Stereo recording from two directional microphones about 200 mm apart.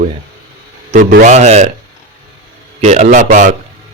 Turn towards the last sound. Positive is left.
turn(degrees=-40)  # may be behind; listen again after turning